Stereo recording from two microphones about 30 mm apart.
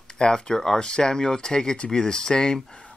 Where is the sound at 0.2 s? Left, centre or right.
Left.